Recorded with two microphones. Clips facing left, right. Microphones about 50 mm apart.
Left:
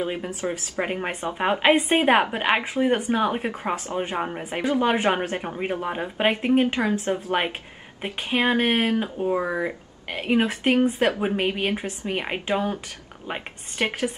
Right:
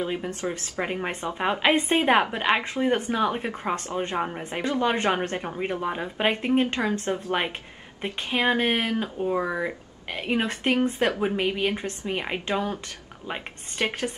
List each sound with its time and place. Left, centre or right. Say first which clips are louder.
0.0 s speech: left 1 dB; centre
1.8 s a woman's voice: left 2 dB; left
2.0 s speech: left 1 dB; centre